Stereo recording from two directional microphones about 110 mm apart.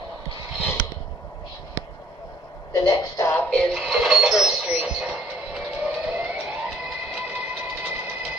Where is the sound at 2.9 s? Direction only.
30° left (ahead or behind).